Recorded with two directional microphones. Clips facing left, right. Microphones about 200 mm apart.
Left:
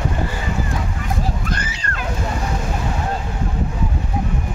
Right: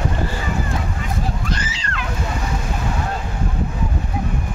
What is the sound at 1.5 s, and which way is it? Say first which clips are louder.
Splash: even; 55° left (ahead or behind).